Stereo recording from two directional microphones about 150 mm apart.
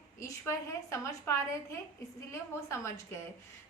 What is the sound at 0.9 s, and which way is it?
A woman's voice, 20° left (ahead or behind).